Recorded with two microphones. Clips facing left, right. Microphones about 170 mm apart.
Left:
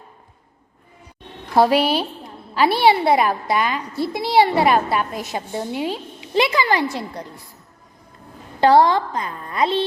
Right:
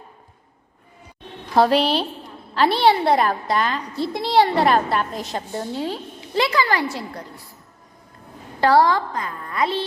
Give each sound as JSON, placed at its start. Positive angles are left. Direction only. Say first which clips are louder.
{"t": 1.5, "sound": "a woman's voice", "louder": "left 1 dB", "side_deg": 10}
{"t": 8.6, "sound": "a woman's voice", "louder": "left 2 dB", "side_deg": 20}